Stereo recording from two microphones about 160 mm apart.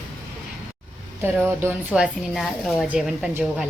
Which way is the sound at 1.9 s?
5° right (ahead or behind).